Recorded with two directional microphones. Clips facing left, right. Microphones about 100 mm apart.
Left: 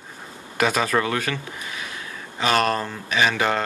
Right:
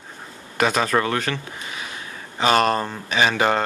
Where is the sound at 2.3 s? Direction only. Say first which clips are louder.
Right 3 dB; 30° right (ahead or behind).